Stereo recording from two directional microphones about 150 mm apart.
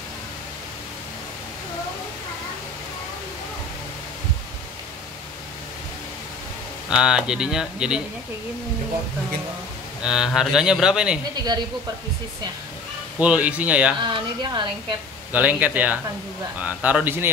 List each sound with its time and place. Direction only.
6.9 s speech: 5° right (ahead or behind)
10.0 s speech: 5° right (ahead or behind)
13.2 s speech: 10° right (ahead or behind)
14.1 s a woman's voice: 30° right (ahead or behind)
15.3 s speech: 10° right (ahead or behind)